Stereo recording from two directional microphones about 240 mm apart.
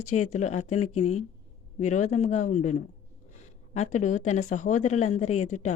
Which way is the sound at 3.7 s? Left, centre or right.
Left.